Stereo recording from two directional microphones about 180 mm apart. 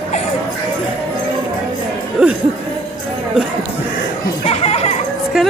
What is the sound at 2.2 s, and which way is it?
Music, 5° right (ahead or behind).